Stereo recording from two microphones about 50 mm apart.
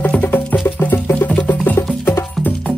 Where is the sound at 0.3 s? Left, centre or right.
Left.